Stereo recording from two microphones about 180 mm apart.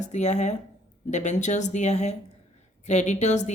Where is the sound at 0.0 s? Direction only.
40° left (ahead or behind).